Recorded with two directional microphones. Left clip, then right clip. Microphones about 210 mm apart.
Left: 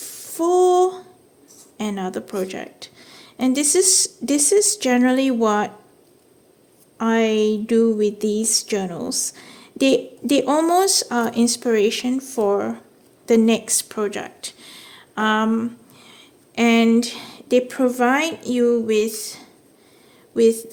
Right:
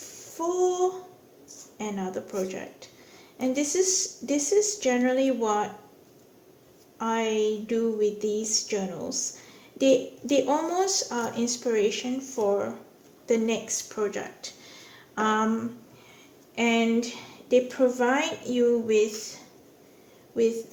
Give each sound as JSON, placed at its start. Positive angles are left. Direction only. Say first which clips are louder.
{"t": 0.0, "sound": "a sound", "louder": "left 8 dB", "side_deg": 55}
{"t": 1.8, "sound": "speech", "louder": "left 6 dB", "side_deg": 55}
{"t": 7.0, "sound": "speech", "louder": "left 7 dB", "side_deg": 60}
{"t": 16.6, "sound": "a woman's voice", "louder": "left 7 dB", "side_deg": 50}